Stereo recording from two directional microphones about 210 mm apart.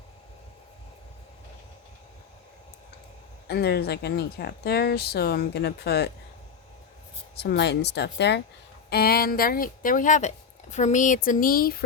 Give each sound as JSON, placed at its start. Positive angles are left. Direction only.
{"t": 3.4, "sound": "speech", "side_deg": 50}
{"t": 7.3, "sound": "speech", "side_deg": 55}